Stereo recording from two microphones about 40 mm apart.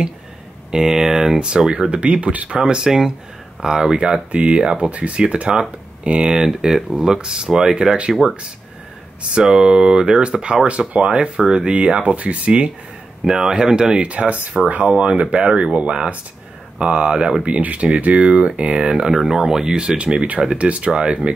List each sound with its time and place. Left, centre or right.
0.7 s speech: centre
1.7 s speech: right
2.6 s speech: centre
9.4 s speech: centre
13.2 s speech: centre
14.5 s speech: centre
15.0 s speech: right
17.5 s speech: right
18.9 s speech: centre
20.0 s speech: right